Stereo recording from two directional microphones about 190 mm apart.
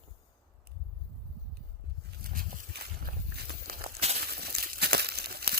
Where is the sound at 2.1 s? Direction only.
50° right (ahead or behind).